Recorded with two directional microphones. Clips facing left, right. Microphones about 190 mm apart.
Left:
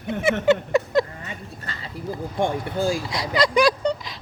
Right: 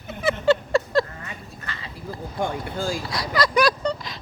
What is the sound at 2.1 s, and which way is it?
Speech, 20° left (ahead or behind).